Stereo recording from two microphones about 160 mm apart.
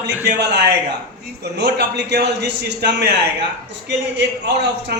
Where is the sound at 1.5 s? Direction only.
90° right.